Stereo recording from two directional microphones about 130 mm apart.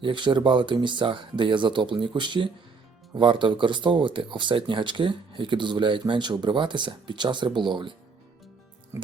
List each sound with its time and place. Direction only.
0.0 s speech: 35° right (ahead or behind)